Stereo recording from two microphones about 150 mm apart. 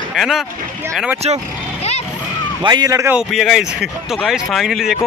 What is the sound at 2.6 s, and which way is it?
Speech, 25° right (ahead or behind).